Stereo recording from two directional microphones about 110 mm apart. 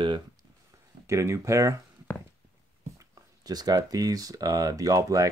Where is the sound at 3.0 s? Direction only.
35° right (ahead or behind).